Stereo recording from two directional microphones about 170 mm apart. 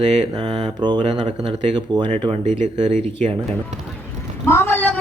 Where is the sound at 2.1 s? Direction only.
40° right (ahead or behind).